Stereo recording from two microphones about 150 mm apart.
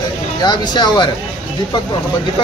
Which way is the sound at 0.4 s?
30° left (ahead or behind).